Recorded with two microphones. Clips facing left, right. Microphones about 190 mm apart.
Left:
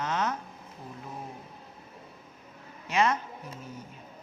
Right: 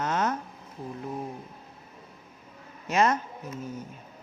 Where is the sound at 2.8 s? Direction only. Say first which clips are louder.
Right 2 dB; 45° right (ahead or behind).